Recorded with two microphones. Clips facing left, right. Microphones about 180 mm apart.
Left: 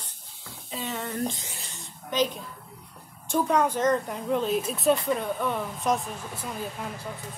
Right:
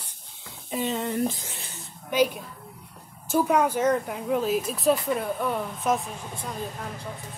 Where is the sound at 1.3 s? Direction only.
Centre (ahead or behind).